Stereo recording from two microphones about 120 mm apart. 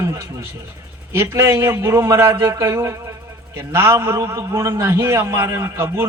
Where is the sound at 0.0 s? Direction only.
20° right (ahead or behind).